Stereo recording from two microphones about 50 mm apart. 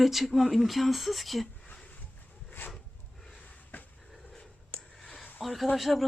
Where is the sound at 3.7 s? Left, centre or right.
Left.